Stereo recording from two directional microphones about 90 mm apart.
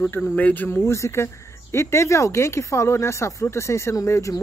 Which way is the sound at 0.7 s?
30° left (ahead or behind).